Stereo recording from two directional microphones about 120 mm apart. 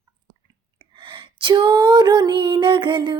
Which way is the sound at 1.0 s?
45° right (ahead or behind).